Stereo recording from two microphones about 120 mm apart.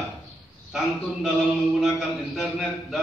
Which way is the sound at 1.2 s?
Centre (ahead or behind).